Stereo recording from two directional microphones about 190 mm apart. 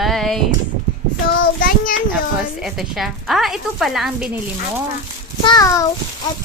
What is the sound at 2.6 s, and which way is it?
A woman's voice, centre (ahead or behind).